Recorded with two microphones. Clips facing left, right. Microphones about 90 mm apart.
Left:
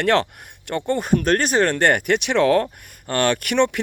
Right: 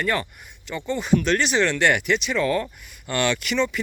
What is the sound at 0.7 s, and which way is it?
Speech, 60° left (ahead or behind).